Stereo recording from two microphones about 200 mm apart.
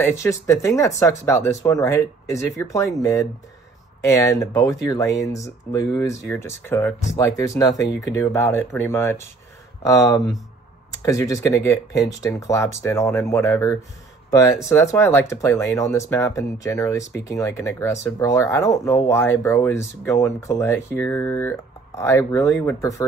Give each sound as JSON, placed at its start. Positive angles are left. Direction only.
{"t": 0.0, "sound": "speech", "side_deg": 15}